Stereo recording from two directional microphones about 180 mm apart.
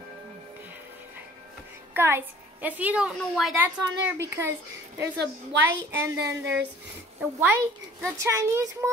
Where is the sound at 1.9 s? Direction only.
10° right (ahead or behind).